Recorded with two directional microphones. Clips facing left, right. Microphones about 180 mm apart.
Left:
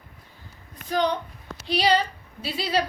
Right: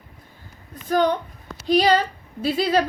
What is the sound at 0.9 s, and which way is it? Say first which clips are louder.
A child's voice: right 4 dB; 50° right (ahead or behind).